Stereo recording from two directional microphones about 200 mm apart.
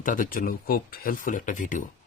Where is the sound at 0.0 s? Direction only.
40° left (ahead or behind).